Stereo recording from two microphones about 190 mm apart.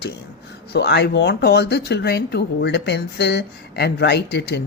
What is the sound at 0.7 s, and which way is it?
Speech, 60° left (ahead or behind).